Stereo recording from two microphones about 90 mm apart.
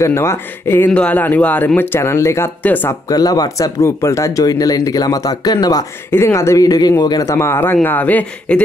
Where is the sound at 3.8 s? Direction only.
30° left (ahead or behind).